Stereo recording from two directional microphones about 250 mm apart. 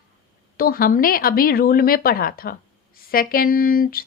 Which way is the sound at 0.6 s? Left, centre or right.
Left.